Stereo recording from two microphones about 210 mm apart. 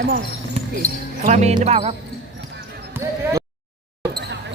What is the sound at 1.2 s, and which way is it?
Speech, 35° right (ahead or behind).